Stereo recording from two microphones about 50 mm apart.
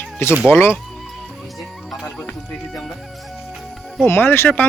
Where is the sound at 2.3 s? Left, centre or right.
Centre.